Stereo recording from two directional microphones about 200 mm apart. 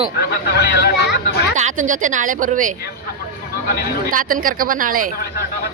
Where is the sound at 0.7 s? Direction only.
55° left (ahead or behind).